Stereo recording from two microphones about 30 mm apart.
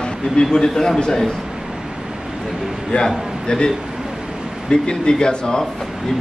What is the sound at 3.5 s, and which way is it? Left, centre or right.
Speech, left.